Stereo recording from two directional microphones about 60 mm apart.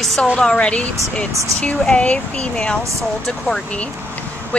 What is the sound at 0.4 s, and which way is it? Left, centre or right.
A woman's voice, centre.